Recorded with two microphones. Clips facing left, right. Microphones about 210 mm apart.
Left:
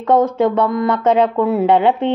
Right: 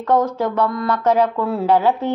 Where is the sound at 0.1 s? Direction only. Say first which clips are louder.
Left 4 dB; 25° left (ahead or behind).